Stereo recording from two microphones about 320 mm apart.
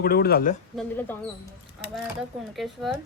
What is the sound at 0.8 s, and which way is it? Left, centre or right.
Speech, centre.